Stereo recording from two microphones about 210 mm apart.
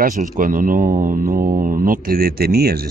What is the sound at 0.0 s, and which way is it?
Speech, 40° right (ahead or behind).